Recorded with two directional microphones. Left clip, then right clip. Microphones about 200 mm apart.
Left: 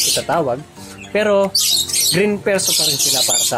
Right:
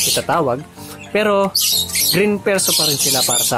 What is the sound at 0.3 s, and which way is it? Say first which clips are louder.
Speech: right 1 dB; 15° right (ahead or behind).